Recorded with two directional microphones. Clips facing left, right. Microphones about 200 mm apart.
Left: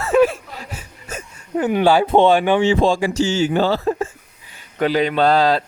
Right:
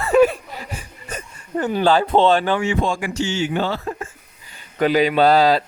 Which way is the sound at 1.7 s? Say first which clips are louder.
Left 2 dB; 10° left (ahead or behind).